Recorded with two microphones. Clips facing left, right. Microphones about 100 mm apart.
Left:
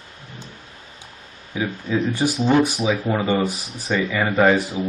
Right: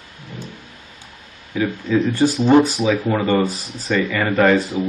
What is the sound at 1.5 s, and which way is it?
Speech, 15° left (ahead or behind).